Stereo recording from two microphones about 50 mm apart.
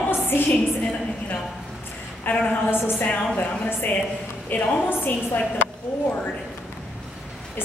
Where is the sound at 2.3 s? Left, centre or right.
Left.